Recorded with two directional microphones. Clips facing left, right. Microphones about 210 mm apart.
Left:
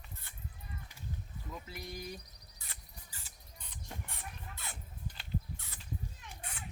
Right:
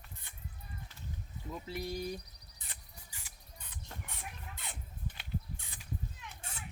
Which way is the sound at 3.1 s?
10° right (ahead or behind).